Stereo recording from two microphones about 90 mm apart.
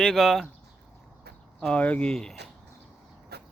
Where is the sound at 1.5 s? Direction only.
5° left (ahead or behind).